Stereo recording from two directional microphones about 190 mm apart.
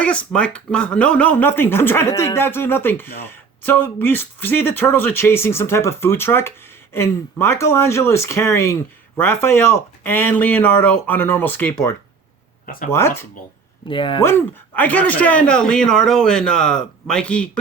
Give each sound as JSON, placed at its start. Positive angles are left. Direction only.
{"t": 0.0, "sound": "speech", "side_deg": 5}
{"t": 12.6, "sound": "speech", "side_deg": 45}
{"t": 12.9, "sound": "speech", "side_deg": 15}
{"t": 13.8, "sound": "speech", "side_deg": 25}
{"t": 14.2, "sound": "speech", "side_deg": 10}